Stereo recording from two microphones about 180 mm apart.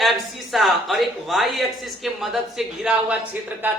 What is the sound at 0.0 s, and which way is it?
Speech, centre (ahead or behind).